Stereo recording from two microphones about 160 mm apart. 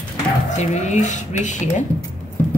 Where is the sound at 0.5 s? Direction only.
45° left (ahead or behind).